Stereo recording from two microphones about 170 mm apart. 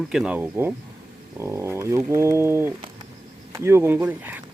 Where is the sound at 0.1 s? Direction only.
5° right (ahead or behind).